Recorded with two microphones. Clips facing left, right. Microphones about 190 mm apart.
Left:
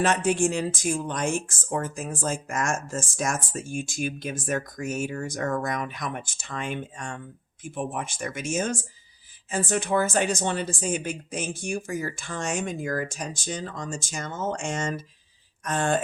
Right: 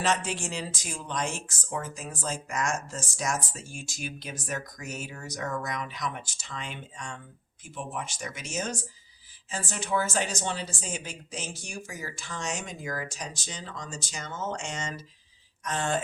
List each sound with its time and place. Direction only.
0.0 s speech: 50° left (ahead or behind)